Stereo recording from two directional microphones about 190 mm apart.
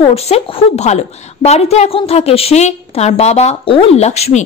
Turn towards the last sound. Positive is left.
turn(degrees=35)  # may be behind; listen again after turning